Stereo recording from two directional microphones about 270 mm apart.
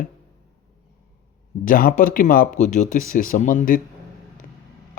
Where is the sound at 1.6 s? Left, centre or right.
Left.